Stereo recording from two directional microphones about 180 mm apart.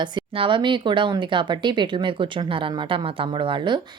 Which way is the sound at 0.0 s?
25° right (ahead or behind).